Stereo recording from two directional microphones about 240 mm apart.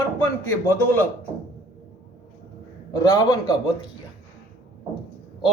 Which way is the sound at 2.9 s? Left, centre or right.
Centre.